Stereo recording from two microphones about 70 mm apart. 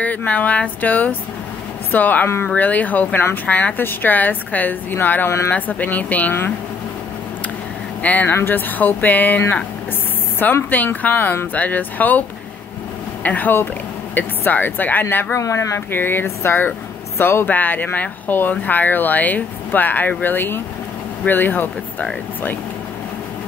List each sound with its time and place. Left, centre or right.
0.0 s speech: left
2.2 s speech: left
2.5 s speech: left
8.0 s speech: left
15.3 s speech: left
15.9 s speech: left